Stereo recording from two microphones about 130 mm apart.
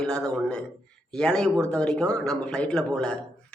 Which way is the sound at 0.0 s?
5° left (ahead or behind).